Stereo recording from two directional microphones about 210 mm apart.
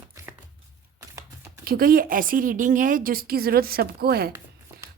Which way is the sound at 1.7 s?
45° right (ahead or behind).